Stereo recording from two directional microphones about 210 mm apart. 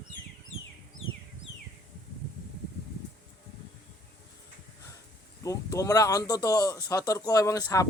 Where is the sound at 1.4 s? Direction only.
65° left (ahead or behind).